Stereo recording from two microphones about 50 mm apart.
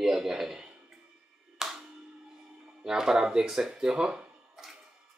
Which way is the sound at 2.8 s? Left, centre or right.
Centre.